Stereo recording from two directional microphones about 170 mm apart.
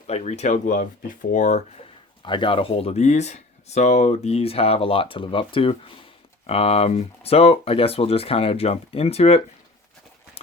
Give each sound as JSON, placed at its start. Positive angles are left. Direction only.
{"t": 0.1, "sound": "speech", "side_deg": 40}
{"t": 2.2, "sound": "speech", "side_deg": 30}